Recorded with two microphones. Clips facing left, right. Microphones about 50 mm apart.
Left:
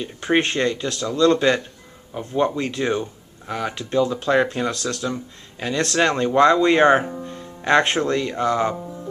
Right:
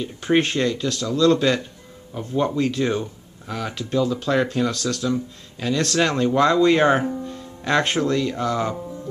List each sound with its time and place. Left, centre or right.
0.0 s speech: centre